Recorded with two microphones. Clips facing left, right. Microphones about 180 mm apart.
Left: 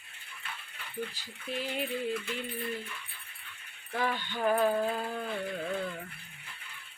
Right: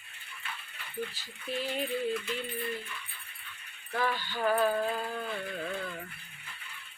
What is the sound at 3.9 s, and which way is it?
Speech, 15° left (ahead or behind).